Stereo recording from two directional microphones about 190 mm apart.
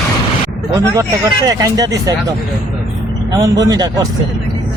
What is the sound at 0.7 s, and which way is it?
Speech, 15° right (ahead or behind).